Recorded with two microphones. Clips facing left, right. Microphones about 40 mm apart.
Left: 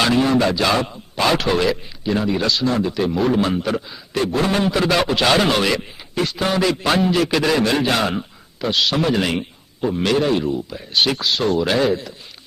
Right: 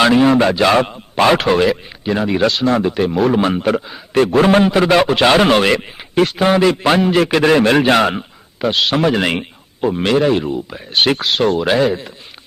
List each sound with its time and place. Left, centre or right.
0.2 s a man's voice: right
6.4 s speech: right
7.1 s a man's voice: right
9.8 s speech: right
10.9 s a man's voice: right
11.6 s speech: centre